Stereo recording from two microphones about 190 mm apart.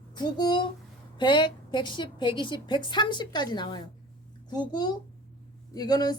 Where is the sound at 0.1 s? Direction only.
20° left (ahead or behind).